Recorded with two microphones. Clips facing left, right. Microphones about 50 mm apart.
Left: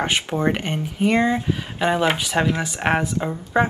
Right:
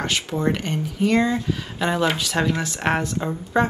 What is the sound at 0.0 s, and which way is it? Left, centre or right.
Speech, left.